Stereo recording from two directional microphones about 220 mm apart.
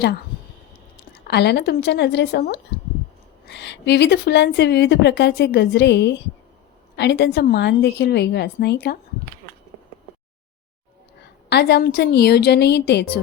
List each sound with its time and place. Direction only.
1.1 s a woman's voice: 50° left (ahead or behind)
11.4 s a woman's voice: 45° left (ahead or behind)